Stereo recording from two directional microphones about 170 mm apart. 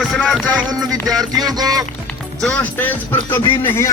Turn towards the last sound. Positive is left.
turn(degrees=15)  # may be behind; listen again after turning